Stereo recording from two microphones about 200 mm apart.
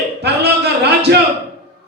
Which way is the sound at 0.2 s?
55° right (ahead or behind).